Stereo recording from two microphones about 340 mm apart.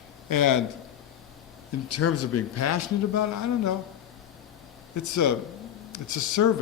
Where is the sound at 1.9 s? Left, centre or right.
Left.